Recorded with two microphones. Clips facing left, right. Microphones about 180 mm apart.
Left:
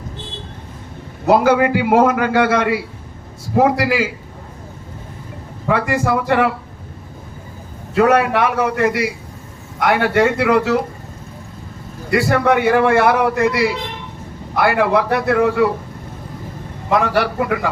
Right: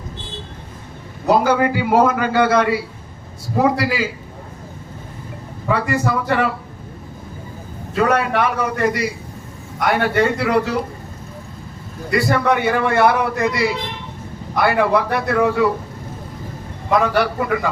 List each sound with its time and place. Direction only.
1.3 s a man's voice: 65° left (ahead or behind)
5.7 s a man's voice: 60° left (ahead or behind)
7.9 s a man's voice: 65° left (ahead or behind)
12.1 s a man's voice: 60° left (ahead or behind)
17.0 s a man's voice: 60° left (ahead or behind)